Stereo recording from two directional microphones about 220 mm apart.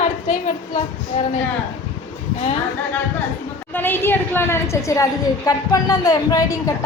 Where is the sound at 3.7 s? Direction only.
10° left (ahead or behind).